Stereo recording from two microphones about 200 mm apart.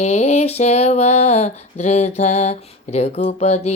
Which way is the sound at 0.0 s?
35° left (ahead or behind).